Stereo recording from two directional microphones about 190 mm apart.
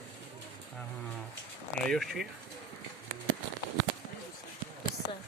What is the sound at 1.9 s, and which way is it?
Speech, centre (ahead or behind).